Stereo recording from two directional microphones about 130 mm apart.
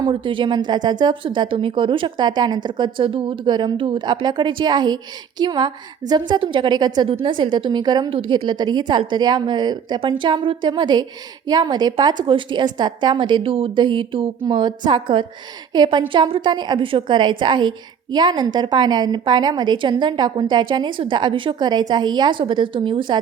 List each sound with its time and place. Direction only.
0.0 s a woman's voice: 40° right (ahead or behind)